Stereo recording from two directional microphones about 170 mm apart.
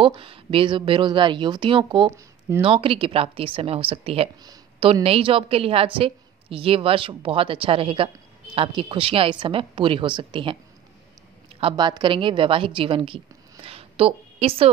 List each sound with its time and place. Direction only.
0.0 s a woman's voice: 30° right (ahead or behind)
11.6 s a woman's voice: 25° right (ahead or behind)